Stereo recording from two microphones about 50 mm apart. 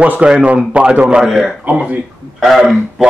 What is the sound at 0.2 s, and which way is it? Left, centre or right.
Speech, right.